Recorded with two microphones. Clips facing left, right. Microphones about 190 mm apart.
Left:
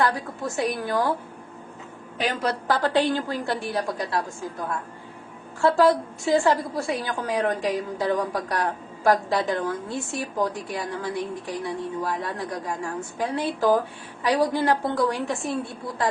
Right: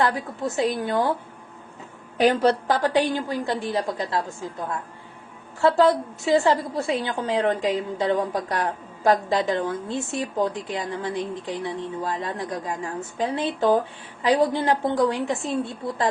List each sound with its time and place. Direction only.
0.5 s a woman's voice: 20° right (ahead or behind)
2.1 s a woman's voice: 35° right (ahead or behind); by 4.2 s 20° right (ahead or behind)
5.6 s a woman's voice: 25° right (ahead or behind)